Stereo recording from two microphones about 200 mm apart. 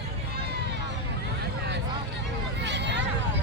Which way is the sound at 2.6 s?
60° right (ahead or behind).